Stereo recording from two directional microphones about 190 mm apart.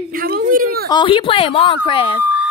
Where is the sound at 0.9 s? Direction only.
25° left (ahead or behind).